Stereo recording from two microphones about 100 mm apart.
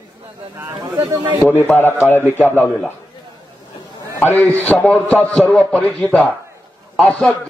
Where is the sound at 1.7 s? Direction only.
20° left (ahead or behind).